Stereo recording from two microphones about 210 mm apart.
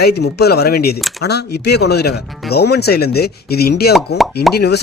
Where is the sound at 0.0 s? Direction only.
50° left (ahead or behind).